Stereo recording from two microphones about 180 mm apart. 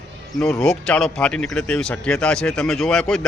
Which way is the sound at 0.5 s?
5° left (ahead or behind).